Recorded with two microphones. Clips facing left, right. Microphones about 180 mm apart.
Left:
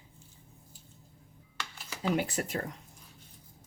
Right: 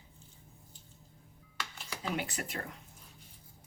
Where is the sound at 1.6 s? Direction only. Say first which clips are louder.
Left 3 dB; centre (ahead or behind).